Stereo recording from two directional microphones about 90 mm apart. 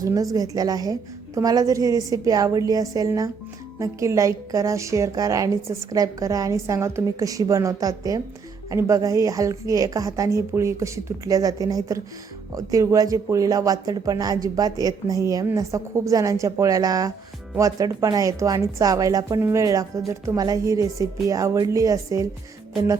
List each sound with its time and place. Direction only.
0.0 s a woman's voice: 40° right (ahead or behind)
19.4 s a woman's voice: 30° right (ahead or behind)